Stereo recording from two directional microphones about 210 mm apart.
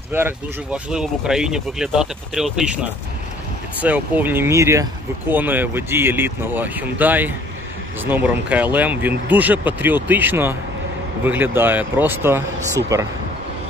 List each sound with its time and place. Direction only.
0.1 s speech: 10° right (ahead or behind)